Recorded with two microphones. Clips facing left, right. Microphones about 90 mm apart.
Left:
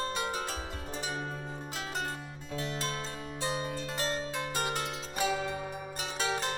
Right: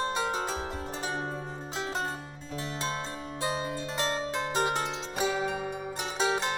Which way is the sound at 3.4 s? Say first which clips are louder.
Right 2 dB; 30° right (ahead or behind).